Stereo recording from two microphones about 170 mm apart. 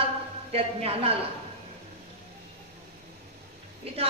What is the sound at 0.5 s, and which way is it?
Speech, 35° right (ahead or behind).